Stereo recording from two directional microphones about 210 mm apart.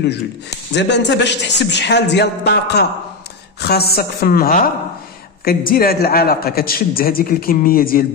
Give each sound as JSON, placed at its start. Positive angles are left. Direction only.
{"t": 0.7, "sound": "a man's voice", "side_deg": 55}